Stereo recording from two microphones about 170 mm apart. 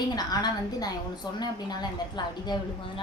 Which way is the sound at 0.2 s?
20° left (ahead or behind).